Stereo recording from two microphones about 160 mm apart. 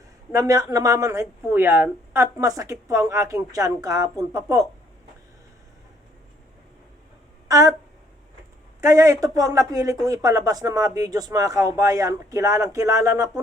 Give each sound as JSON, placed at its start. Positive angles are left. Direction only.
{"t": 0.3, "sound": "speech", "side_deg": -20}
{"t": 7.4, "sound": "a sound", "side_deg": -20}
{"t": 8.8, "sound": "speech", "side_deg": -20}